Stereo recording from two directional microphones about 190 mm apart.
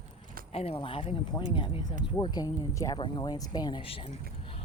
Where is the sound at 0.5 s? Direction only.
30° left (ahead or behind).